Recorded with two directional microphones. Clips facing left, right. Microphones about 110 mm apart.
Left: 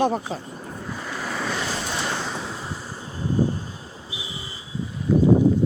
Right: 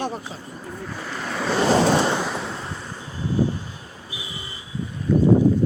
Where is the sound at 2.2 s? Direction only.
Centre (ahead or behind).